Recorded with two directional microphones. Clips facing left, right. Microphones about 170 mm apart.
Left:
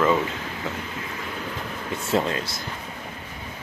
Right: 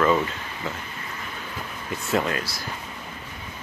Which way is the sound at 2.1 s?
25° left (ahead or behind).